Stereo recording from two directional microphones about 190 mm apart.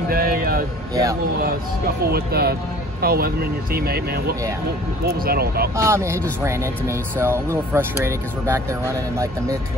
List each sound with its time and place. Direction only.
0.1 s music: 50° right (ahead or behind)
2.0 s speech: 55° right (ahead or behind)
5.8 s speech: 15° right (ahead or behind)